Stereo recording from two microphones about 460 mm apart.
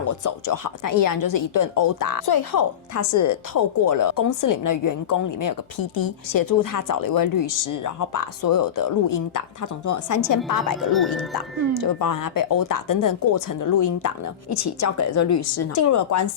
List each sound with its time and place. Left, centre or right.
0.0 s speech: left
2.9 s speech: left
10.9 s speech: centre
11.8 s a woman's voice: left